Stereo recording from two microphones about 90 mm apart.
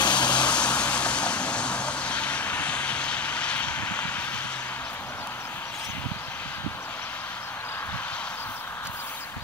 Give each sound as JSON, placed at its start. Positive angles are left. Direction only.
{"t": 0.0, "sound": "vehicle", "side_deg": 55}
{"t": 0.3, "sound": "vehicle", "side_deg": 15}